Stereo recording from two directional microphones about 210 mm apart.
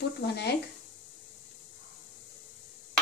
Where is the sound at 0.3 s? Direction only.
50° left (ahead or behind).